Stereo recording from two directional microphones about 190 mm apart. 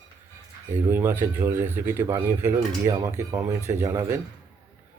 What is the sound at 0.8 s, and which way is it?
Speech, 10° right (ahead or behind).